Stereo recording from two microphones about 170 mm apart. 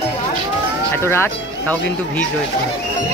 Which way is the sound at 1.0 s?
15° left (ahead or behind).